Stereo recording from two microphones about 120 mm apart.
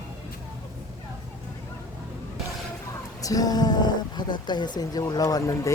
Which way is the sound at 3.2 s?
30° left (ahead or behind).